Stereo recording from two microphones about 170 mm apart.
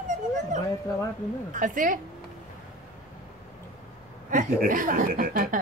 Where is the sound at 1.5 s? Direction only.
50° right (ahead or behind).